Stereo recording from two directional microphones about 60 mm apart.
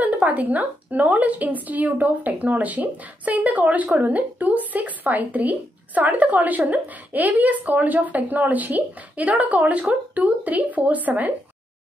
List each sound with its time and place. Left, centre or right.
0.0 s a woman's voice: right